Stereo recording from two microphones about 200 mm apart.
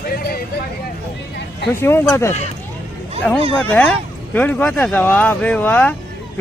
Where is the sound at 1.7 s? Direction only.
10° left (ahead or behind).